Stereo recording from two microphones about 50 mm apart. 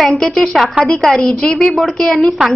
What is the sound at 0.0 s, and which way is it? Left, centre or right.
A woman's voice, centre.